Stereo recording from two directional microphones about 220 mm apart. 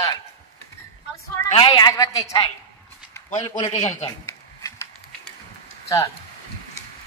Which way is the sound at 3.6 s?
30° left (ahead or behind).